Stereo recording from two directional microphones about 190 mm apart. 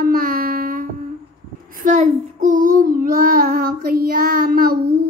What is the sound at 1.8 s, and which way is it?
Child singing, 40° right (ahead or behind).